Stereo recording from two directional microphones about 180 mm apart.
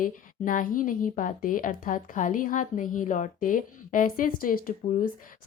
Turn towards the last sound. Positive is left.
turn(degrees=50)  # may be behind; listen again after turning